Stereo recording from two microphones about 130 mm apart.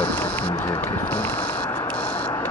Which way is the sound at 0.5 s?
25° left (ahead or behind).